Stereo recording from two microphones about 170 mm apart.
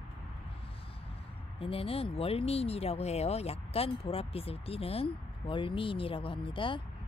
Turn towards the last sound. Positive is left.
turn(degrees=30)  # may be behind; listen again after turning